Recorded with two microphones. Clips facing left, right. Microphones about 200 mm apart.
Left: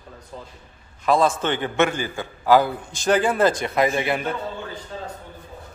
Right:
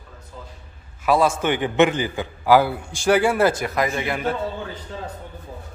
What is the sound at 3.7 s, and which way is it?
Speech, 25° left (ahead or behind).